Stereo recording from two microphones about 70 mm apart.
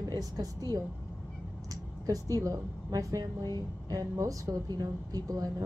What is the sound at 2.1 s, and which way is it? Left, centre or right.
A woman's voice, right.